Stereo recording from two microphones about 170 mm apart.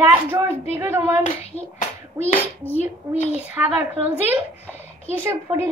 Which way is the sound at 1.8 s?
40° left (ahead or behind).